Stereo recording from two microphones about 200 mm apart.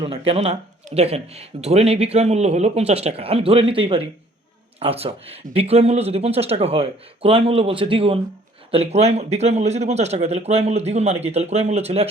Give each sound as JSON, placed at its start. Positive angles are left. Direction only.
{"t": 0.0, "sound": "speech", "side_deg": -25}